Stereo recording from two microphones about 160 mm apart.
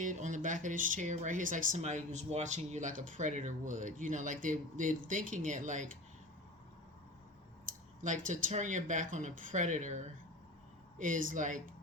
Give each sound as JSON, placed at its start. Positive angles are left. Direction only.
{"t": 0.0, "sound": "speech", "side_deg": -50}
{"t": 8.0, "sound": "speech", "side_deg": -50}